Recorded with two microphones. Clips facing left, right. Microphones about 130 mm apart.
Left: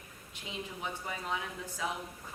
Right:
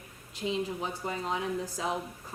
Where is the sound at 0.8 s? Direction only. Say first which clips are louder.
Right 5 dB; 35° right (ahead or behind).